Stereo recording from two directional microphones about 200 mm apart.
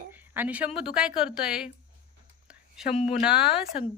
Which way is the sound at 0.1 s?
10° right (ahead or behind).